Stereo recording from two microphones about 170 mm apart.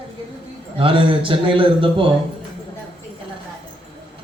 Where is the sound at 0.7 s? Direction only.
30° right (ahead or behind).